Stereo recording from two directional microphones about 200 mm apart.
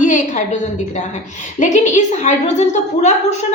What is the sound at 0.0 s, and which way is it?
A woman's voice, 35° left (ahead or behind).